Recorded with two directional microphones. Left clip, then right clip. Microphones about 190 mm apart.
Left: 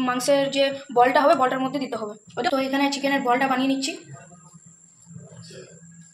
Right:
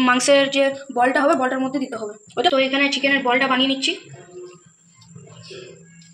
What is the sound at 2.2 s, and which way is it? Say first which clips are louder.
Speech: right 8 dB; 30° right (ahead or behind).